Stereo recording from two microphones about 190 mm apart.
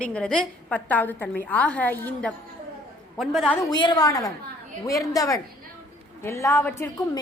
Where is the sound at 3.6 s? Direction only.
20° left (ahead or behind).